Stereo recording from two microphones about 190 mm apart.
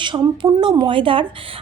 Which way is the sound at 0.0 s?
25° right (ahead or behind).